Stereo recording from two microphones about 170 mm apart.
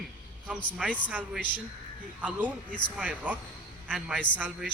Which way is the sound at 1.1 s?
10° right (ahead or behind).